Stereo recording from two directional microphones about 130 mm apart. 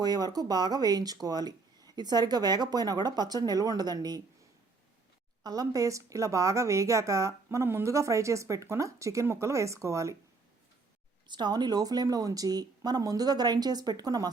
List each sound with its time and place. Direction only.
0.0 s speech: 30° right (ahead or behind)
5.4 s speech: 30° right (ahead or behind)
11.3 s speech: 35° right (ahead or behind)